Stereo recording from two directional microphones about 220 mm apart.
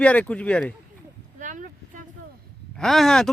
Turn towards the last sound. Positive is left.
turn(degrees=0)  # may be behind; listen again after turning